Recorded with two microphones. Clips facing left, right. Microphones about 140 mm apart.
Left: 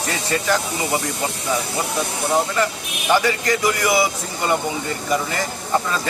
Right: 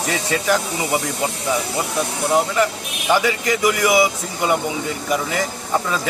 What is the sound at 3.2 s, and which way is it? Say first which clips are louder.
A man's voice: right 1 dB; 5° right (ahead or behind).